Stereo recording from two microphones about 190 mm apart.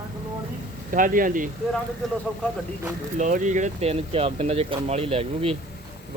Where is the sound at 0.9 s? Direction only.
45° right (ahead or behind).